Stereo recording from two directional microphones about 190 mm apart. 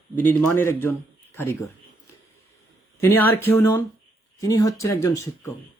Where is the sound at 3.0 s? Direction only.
10° left (ahead or behind).